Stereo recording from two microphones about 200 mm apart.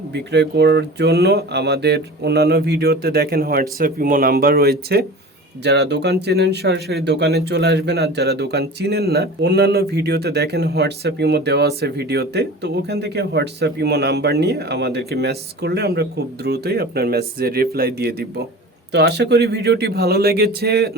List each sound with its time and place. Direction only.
0.1 s speech: 60° right (ahead or behind)